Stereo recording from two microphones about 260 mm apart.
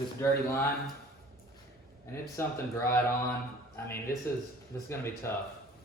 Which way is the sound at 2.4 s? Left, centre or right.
Centre.